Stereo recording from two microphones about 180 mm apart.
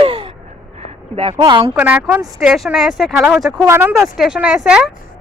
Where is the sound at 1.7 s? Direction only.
10° right (ahead or behind).